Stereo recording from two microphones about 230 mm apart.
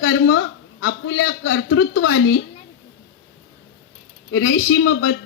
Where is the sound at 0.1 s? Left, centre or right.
Left.